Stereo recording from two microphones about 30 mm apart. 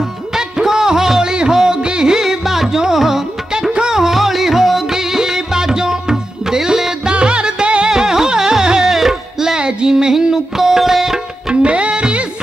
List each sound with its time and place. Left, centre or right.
0.4 s music: right
2.2 s music: centre
7.1 s music: right
7.9 s music: right
9.6 s music: right; by 11.1 s centre
11.6 s music: right